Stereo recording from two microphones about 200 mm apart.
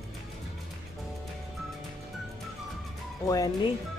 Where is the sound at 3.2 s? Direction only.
15° left (ahead or behind).